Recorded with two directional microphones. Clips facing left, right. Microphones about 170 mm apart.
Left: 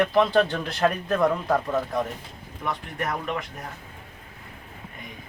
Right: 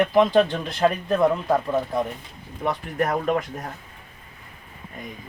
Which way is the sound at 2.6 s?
35° right (ahead or behind).